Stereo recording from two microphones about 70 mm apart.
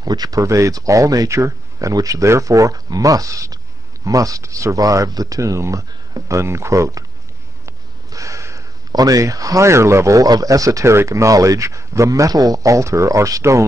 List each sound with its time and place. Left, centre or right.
0.0 s speech: right
7.6 s a sound: right
8.9 s speech: right